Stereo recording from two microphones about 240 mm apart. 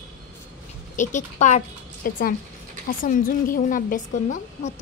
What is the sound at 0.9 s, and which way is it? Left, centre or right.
A woman's voice, left.